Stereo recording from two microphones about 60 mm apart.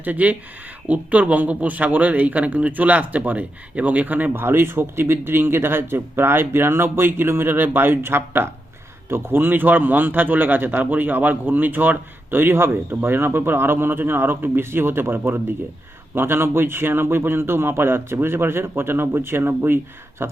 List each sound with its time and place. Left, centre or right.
0.0 s speech: right
4.4 s a man's voice: right